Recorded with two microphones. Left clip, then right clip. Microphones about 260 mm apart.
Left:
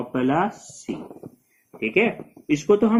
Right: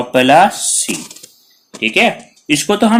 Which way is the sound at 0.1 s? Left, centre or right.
Right.